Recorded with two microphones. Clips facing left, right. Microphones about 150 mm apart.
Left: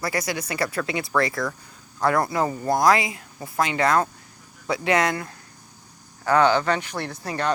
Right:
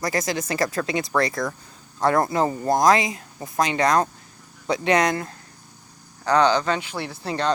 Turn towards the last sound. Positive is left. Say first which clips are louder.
# right 1 dB
turn(degrees=-25)  # may be behind; listen again after turning